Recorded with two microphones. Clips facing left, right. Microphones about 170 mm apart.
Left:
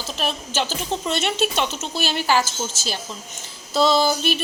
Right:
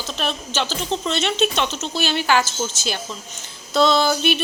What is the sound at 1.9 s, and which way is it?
Speech, 40° left (ahead or behind).